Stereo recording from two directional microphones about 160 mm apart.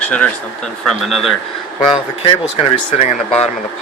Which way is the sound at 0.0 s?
10° left (ahead or behind).